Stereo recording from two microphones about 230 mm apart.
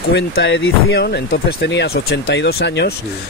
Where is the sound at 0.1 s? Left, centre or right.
Left.